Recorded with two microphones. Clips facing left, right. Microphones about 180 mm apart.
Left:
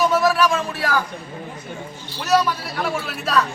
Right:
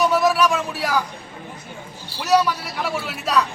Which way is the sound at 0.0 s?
15° right (ahead or behind).